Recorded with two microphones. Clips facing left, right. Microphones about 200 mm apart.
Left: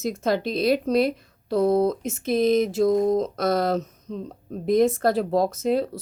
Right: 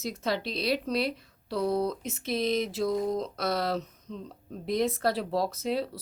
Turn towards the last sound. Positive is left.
turn(degrees=50)  # may be behind; listen again after turning